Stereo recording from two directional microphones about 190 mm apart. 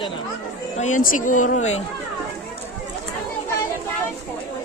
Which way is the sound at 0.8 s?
40° left (ahead or behind).